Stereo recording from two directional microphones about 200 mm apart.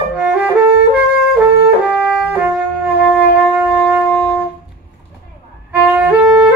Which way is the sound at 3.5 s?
5° right (ahead or behind).